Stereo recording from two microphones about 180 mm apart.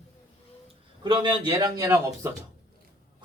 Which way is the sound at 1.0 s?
25° right (ahead or behind).